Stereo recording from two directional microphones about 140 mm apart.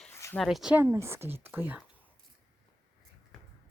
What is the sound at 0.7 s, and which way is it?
Speech, 15° right (ahead or behind).